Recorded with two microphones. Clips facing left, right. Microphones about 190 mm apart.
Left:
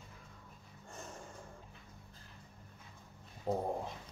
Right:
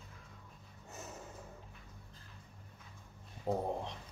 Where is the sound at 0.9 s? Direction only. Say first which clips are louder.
Right 1 dB; 5° right (ahead or behind).